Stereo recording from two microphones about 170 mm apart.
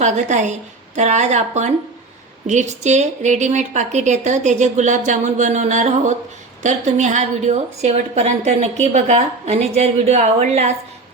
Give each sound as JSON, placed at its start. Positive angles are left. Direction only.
{"t": 0.0, "sound": "a woman's voice", "side_deg": -45}